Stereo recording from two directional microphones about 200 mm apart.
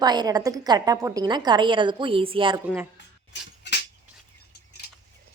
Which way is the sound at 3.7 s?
60° left (ahead or behind).